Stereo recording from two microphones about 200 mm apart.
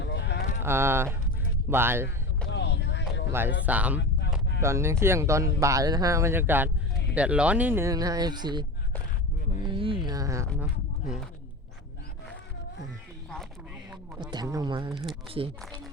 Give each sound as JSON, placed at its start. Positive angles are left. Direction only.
{"t": 0.0, "sound": "livestock", "side_deg": 60}
{"t": 0.6, "sound": "speech", "side_deg": -10}
{"t": 2.5, "sound": "vehicle", "side_deg": 60}
{"t": 3.7, "sound": "speech", "side_deg": -5}
{"t": 9.6, "sound": "a sound", "side_deg": -25}
{"t": 11.0, "sound": "speech", "side_deg": 0}
{"t": 14.2, "sound": "speech", "side_deg": -20}